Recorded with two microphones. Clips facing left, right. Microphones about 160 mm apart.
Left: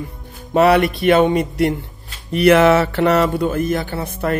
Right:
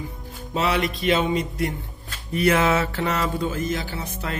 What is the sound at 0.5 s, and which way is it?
Speech, 65° left (ahead or behind).